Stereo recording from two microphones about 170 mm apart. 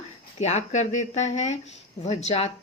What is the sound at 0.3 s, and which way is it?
A woman's voice, 40° left (ahead or behind).